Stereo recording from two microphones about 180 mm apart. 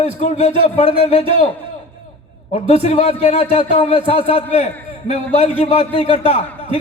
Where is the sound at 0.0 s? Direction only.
40° left (ahead or behind).